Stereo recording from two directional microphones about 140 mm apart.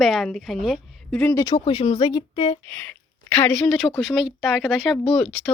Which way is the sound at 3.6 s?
5° left (ahead or behind).